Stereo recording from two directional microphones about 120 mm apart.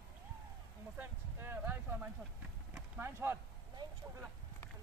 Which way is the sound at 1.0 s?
20° right (ahead or behind).